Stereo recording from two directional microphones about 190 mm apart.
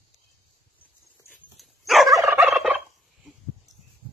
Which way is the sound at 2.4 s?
5° right (ahead or behind).